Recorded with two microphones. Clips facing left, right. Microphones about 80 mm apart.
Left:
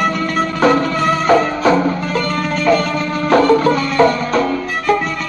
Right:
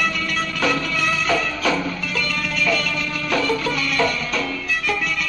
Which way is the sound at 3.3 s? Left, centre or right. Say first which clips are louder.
Left 11 dB; left.